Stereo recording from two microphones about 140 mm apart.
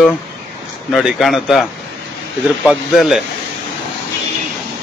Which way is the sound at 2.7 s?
5° right (ahead or behind).